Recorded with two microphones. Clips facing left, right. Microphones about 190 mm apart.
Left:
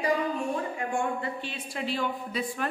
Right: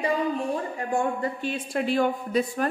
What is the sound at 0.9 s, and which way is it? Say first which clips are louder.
Speech: right 7 dB; 40° right (ahead or behind).